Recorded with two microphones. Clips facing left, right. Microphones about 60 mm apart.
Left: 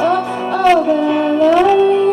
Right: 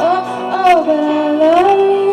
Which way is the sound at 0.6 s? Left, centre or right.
Centre.